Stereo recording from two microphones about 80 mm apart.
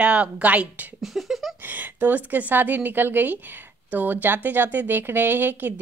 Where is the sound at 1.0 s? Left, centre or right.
Centre.